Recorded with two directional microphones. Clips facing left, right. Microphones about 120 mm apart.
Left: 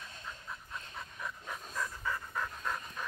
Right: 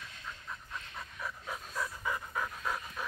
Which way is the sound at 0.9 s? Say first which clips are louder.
Right 1 dB; 5° right (ahead or behind).